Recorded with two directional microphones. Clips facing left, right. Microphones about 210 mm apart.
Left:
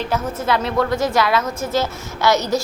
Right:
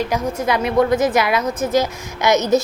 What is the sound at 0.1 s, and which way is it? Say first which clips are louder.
A woman's voice: right 1 dB; 15° right (ahead or behind).